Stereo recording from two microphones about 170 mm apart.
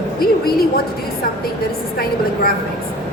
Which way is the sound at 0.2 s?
60° left (ahead or behind).